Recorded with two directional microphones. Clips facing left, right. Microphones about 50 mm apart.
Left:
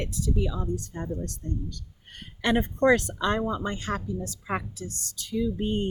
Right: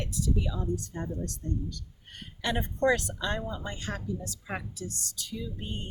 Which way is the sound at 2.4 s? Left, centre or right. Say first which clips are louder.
Left 5 dB; left.